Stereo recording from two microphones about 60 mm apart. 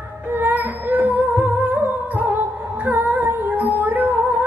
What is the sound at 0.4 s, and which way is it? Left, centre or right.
Music, right.